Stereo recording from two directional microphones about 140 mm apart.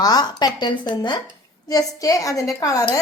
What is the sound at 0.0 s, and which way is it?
Speech, 30° left (ahead or behind).